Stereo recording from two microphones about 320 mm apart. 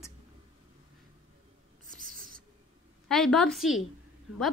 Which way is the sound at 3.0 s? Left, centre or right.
Centre.